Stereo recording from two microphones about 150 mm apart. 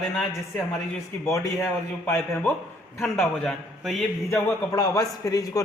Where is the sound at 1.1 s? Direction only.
10° left (ahead or behind).